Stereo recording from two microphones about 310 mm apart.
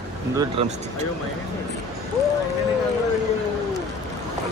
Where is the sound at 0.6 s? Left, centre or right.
Centre.